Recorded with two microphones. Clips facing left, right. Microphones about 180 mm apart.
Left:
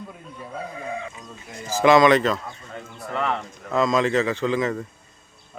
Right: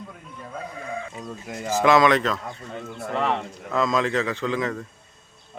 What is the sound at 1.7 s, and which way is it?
Speech, centre (ahead or behind).